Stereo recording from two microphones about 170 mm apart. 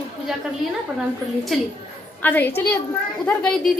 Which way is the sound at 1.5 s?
Centre (ahead or behind).